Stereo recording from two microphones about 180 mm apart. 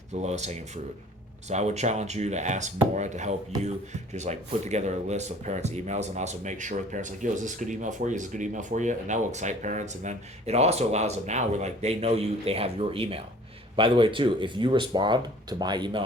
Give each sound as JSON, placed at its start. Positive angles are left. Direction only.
{"t": 0.1, "sound": "speech", "side_deg": -40}